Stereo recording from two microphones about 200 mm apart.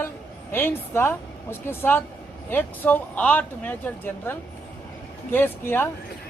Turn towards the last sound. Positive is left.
turn(degrees=10)  # may be behind; listen again after turning